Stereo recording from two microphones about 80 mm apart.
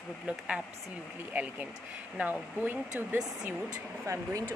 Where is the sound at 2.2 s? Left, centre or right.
Right.